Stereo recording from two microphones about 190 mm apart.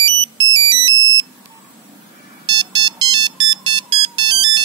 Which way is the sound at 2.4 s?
25° right (ahead or behind).